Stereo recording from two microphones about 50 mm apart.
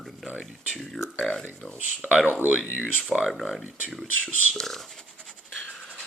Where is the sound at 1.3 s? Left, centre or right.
Centre.